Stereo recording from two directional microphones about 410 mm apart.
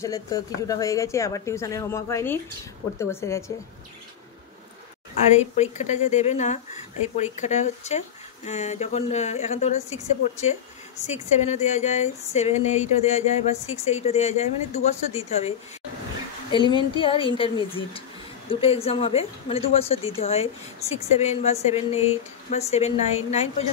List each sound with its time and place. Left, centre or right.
0.0 s a woman's voice: centre
5.3 s a woman's voice: centre
16.7 s a woman's voice: centre